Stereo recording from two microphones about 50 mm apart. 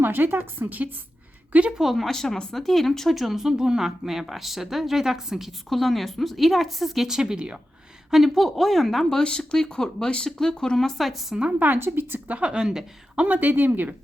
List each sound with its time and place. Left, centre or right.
0.0 s speech: right
1.8 s speech: centre
2.0 s speech: centre
5.6 s speech: centre
8.1 s speech: centre
11.8 s speech: right
12.5 s speech: centre
13.1 s speech: right